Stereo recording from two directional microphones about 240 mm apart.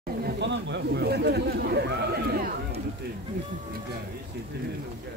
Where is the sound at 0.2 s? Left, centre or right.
Right.